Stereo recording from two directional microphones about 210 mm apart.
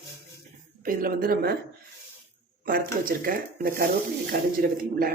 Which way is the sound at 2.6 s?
45° right (ahead or behind).